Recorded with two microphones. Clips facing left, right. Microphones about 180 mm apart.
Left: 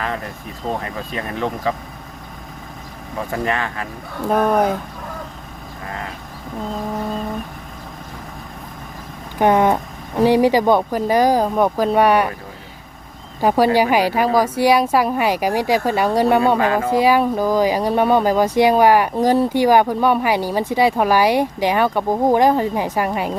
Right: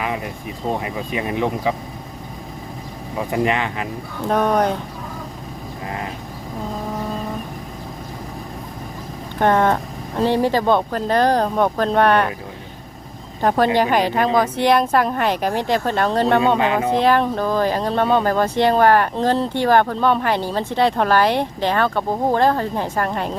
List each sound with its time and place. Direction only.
0.0 s a sound: 10° right (ahead or behind)
0.8 s speech: 15° right (ahead or behind)
3.2 s speech: 15° right (ahead or behind)
4.3 s speech: 5° left (ahead or behind)
9.4 s speech: 10° left (ahead or behind)
13.4 s speech: 10° left (ahead or behind)
16.6 s speech: 20° right (ahead or behind)
16.9 s speech: 10° left (ahead or behind)